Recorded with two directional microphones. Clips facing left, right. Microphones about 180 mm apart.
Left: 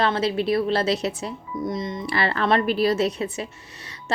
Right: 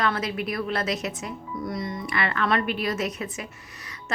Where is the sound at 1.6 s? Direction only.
20° left (ahead or behind).